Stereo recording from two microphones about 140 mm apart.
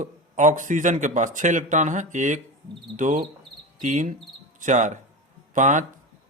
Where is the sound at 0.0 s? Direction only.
60° right (ahead or behind).